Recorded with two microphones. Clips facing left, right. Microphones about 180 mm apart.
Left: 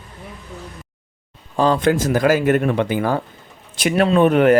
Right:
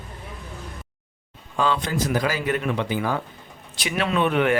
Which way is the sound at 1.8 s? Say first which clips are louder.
Left 8 dB; 50° left (ahead or behind).